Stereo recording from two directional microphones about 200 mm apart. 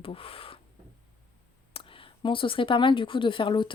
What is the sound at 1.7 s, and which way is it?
Speech, 25° left (ahead or behind).